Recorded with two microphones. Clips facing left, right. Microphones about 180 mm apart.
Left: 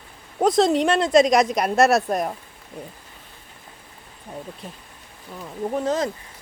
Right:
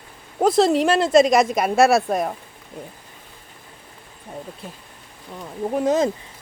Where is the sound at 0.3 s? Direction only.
5° right (ahead or behind).